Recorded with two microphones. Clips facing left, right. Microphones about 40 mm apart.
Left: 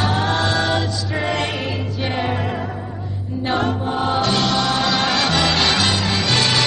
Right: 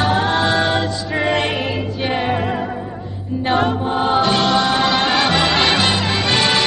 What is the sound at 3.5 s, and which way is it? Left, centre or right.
Music, centre.